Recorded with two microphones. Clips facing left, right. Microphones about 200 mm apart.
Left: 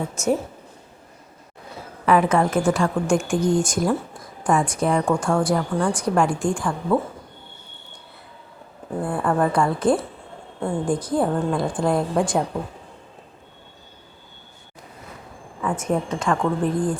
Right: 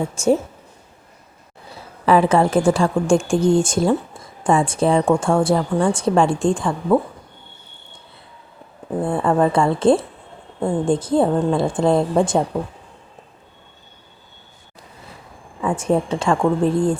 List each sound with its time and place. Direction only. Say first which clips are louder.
0.1 s speech: right 5 dB; 30° right (ahead or behind)
2.0 s speech: right 3 dB; 30° right (ahead or behind)
9.0 s speech: right 4 dB; 25° right (ahead or behind)
15.6 s speech: right 4 dB; 30° right (ahead or behind)